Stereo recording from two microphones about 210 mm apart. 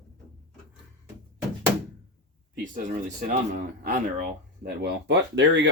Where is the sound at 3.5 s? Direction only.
40° right (ahead or behind).